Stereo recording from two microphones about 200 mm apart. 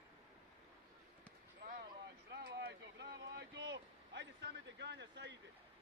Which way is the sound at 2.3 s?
60° right (ahead or behind).